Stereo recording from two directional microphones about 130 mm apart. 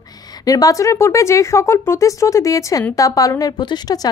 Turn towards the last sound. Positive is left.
turn(degrees=30)  # may be behind; listen again after turning